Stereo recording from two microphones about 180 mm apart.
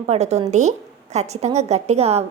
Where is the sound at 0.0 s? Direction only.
40° right (ahead or behind).